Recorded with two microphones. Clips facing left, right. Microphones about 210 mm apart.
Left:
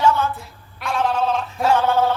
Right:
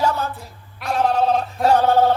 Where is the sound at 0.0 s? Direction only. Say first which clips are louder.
Left 3 dB; 40° right (ahead or behind).